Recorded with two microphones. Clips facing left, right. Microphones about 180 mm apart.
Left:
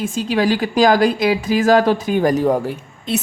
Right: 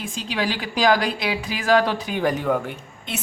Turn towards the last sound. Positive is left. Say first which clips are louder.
# left 9 dB
turn(degrees=35)  # may be behind; listen again after turning